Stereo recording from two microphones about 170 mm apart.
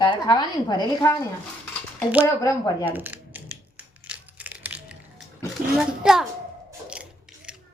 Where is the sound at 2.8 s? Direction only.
10° right (ahead or behind).